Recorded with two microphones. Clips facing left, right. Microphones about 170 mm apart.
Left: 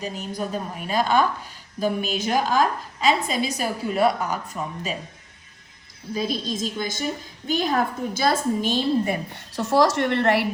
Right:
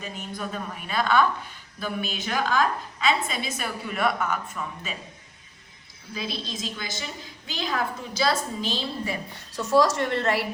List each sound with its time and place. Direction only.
0.0 s a woman's voice: 35° left (ahead or behind)
6.1 s a woman's voice: 45° left (ahead or behind); by 10.5 s 60° left (ahead or behind)